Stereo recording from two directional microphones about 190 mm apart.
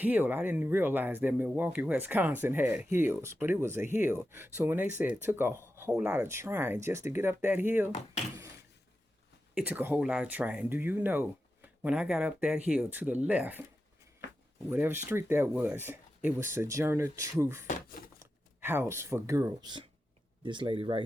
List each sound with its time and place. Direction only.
0.0 s speech: 10° right (ahead or behind)
9.6 s speech: 10° right (ahead or behind)
14.7 s speech: 10° right (ahead or behind); by 21.0 s 25° right (ahead or behind)